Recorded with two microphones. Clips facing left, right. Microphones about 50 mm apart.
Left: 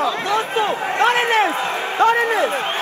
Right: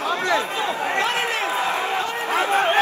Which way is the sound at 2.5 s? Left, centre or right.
Right.